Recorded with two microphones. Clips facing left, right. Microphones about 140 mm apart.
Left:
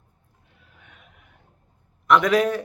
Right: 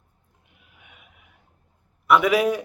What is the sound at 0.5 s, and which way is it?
Neigh, 15° right (ahead or behind).